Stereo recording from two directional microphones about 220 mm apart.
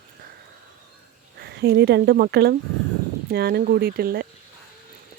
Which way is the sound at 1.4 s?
45° right (ahead or behind).